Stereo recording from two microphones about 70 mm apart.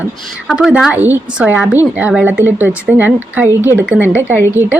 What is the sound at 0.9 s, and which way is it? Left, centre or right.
A woman's voice, right.